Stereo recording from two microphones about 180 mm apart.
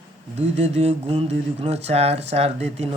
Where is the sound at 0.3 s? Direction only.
40° right (ahead or behind).